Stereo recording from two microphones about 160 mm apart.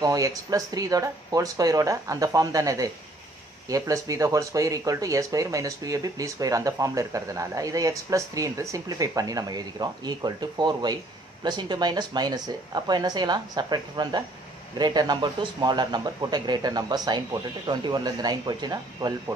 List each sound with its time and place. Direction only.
0.0 s speech: 20° right (ahead or behind)